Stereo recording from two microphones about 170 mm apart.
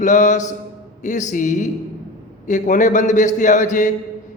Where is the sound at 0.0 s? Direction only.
45° left (ahead or behind).